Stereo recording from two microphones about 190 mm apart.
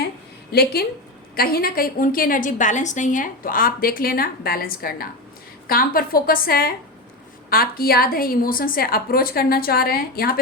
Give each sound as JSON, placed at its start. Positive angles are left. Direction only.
{"t": 0.5, "sound": "a woman's voice", "side_deg": 55}